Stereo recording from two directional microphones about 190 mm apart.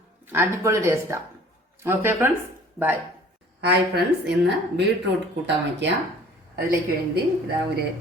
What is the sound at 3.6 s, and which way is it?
Speech, 60° right (ahead or behind).